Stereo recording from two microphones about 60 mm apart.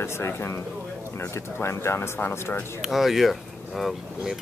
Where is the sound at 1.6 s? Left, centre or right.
Left.